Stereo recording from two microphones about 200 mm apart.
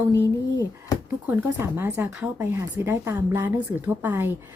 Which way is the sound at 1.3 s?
10° right (ahead or behind).